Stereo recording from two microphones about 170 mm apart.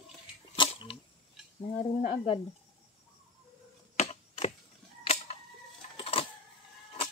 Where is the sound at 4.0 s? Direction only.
40° left (ahead or behind).